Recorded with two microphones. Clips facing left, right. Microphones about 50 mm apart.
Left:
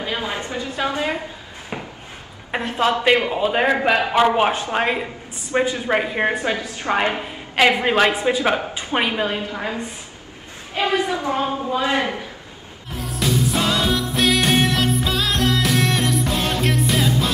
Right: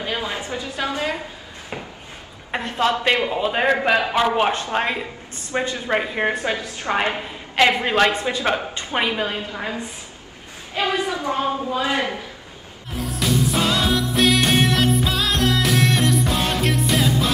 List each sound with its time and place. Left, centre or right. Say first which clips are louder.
0.2 s a woman's voice: left 1 dB; left
2.5 s a man's voice: left 1 dB; centre
10.7 s a woman's voice: left 2 dB; left
12.9 s music: even; centre